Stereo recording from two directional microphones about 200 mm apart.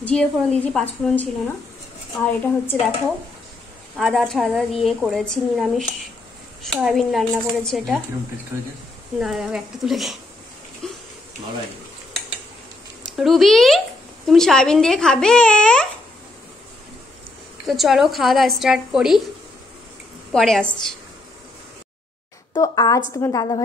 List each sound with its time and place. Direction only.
0.0 s a woman's voice: 5° left (ahead or behind)
2.4 s a woman's voice: 10° left (ahead or behind)
3.9 s a woman's voice: centre (ahead or behind)
9.2 s a woman's voice: 5° right (ahead or behind)
10.8 s a sound: 5° left (ahead or behind)
13.1 s a woman's voice: centre (ahead or behind)
17.6 s a woman's voice: centre (ahead or behind)
20.3 s a woman's voice: centre (ahead or behind)
22.5 s a woman's voice: 20° left (ahead or behind)